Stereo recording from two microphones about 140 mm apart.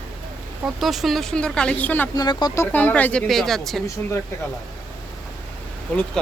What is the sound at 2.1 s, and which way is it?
Speech, 30° left (ahead or behind).